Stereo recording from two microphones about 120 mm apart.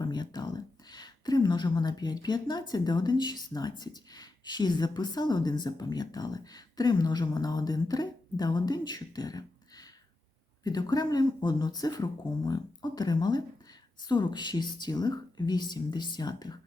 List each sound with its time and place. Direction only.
0.0 s a woman's voice: 35° left (ahead or behind)